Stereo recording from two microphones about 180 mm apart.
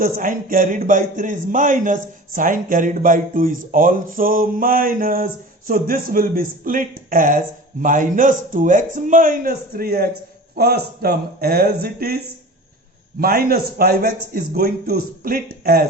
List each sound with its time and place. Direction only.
0.0 s a man's voice: 50° right (ahead or behind)
13.1 s a man's voice: 55° right (ahead or behind)